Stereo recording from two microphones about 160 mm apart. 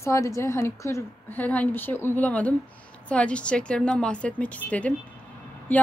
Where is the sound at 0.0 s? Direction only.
20° left (ahead or behind).